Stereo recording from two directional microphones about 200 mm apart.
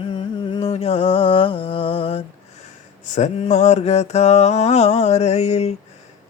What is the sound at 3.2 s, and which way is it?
Mantra, 35° left (ahead or behind).